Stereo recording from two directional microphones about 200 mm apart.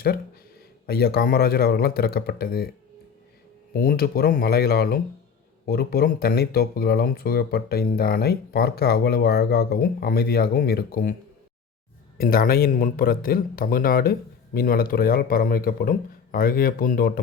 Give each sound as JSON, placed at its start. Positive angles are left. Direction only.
{"t": 0.9, "sound": "speech", "side_deg": 50}
{"t": 3.7, "sound": "speech", "side_deg": 45}
{"t": 12.1, "sound": "speech", "side_deg": 45}